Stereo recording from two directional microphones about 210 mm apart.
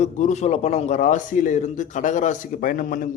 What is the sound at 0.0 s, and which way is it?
A man's voice, 35° left (ahead or behind).